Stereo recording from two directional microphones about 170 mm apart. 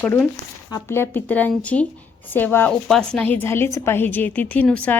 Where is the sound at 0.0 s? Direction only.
10° left (ahead or behind).